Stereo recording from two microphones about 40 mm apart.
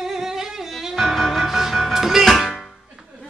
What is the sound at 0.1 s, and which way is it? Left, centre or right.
Music, centre.